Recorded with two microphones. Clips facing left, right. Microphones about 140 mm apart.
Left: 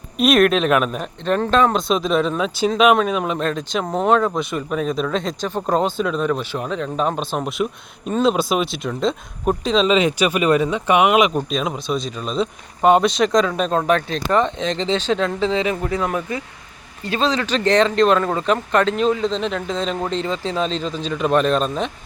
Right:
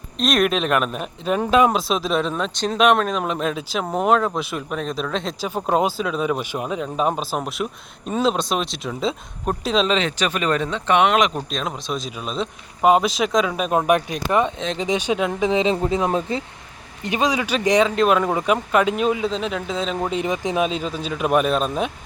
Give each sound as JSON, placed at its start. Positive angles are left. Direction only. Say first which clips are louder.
{"t": 0.2, "sound": "speech", "louder": "left 5 dB", "side_deg": 5}